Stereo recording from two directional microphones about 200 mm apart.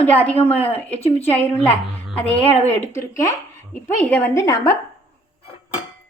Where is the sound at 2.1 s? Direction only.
10° left (ahead or behind).